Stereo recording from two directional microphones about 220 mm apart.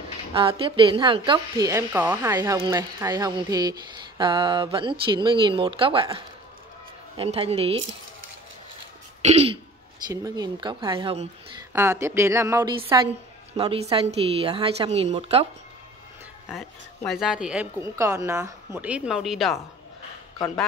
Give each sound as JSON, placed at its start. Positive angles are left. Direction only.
{"t": 0.3, "sound": "a woman's voice", "side_deg": -25}
{"t": 9.2, "sound": "a woman's voice", "side_deg": -30}
{"t": 10.0, "sound": "a woman's voice", "side_deg": -15}
{"t": 11.7, "sound": "a woman's voice", "side_deg": -10}
{"t": 16.4, "sound": "a woman's voice", "side_deg": 0}